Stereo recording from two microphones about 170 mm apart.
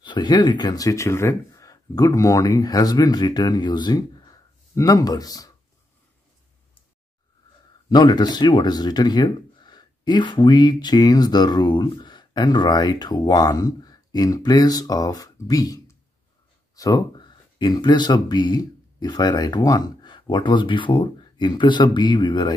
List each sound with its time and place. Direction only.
0.0 s speech: 25° left (ahead or behind)
7.9 s speech: 25° left (ahead or behind)